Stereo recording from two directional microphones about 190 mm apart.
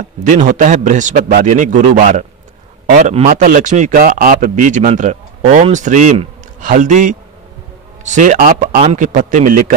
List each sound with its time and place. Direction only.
0.2 s speech: 40° right (ahead or behind)